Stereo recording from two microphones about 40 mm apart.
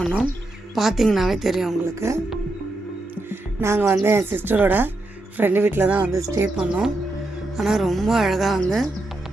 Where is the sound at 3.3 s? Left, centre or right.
Right.